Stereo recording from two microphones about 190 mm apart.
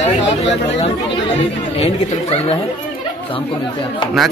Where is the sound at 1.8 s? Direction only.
30° left (ahead or behind).